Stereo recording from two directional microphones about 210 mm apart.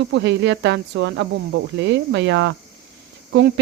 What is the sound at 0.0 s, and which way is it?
Cricket, 60° right (ahead or behind).